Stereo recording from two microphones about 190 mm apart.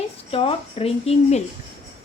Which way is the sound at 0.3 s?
30° left (ahead or behind).